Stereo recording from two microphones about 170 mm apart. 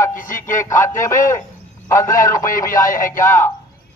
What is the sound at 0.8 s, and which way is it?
Speech, 15° left (ahead or behind).